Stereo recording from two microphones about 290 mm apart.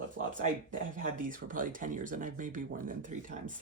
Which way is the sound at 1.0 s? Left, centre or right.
Right.